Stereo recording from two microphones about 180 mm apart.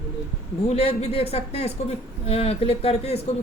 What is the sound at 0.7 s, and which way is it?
Speech, 35° left (ahead or behind).